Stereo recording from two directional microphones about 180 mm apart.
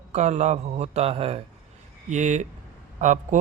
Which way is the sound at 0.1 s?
40° right (ahead or behind).